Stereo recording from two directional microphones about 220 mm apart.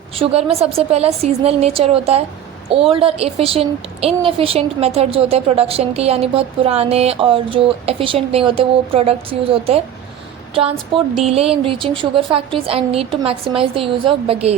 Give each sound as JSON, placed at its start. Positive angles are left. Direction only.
{"t": 0.2, "sound": "a child's voice", "side_deg": -25}